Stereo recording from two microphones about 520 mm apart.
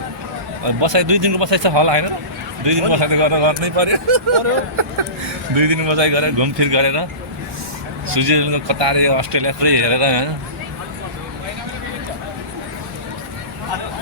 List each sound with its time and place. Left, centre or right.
0.6 s a man's voice: right
6.3 s speech: right